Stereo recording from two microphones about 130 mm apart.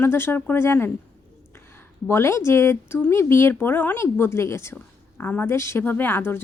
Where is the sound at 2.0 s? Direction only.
20° left (ahead or behind).